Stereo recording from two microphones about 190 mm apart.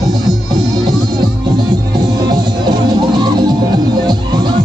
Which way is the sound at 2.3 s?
20° right (ahead or behind).